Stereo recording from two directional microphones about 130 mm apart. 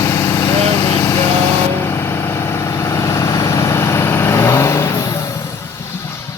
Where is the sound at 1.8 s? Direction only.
20° left (ahead or behind).